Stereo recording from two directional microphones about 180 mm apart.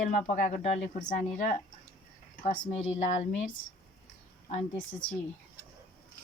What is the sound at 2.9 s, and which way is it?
Speech, 40° left (ahead or behind).